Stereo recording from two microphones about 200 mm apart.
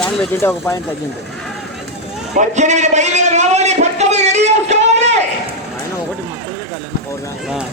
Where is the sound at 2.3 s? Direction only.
35° right (ahead or behind).